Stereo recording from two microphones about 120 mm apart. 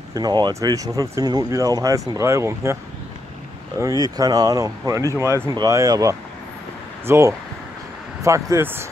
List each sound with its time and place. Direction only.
0.1 s speech: 35° right (ahead or behind)
3.8 s speech: 30° right (ahead or behind)